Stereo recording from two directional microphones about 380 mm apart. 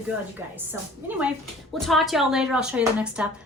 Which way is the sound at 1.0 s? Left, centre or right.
Centre.